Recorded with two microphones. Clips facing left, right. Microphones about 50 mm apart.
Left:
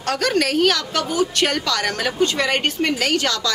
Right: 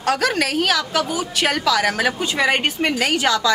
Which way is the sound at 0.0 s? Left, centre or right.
Centre.